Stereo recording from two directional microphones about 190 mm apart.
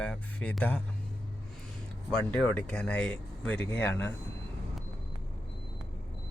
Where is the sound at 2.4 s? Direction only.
5° left (ahead or behind).